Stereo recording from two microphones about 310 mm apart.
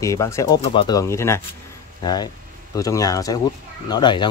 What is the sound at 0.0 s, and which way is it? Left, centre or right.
Speech, centre.